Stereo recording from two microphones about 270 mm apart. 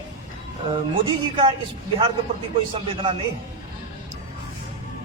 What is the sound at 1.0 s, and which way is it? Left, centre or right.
Speech, centre.